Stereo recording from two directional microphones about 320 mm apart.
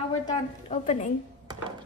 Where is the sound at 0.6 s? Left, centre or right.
Left.